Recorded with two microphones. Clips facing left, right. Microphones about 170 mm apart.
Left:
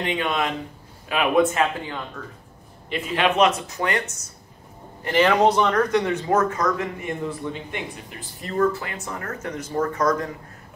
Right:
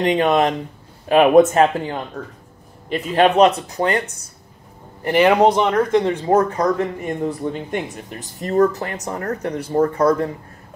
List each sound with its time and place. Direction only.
0.0 s speech: 40° right (ahead or behind)
5.0 s a man's voice: 15° right (ahead or behind); by 10.3 s 30° right (ahead or behind)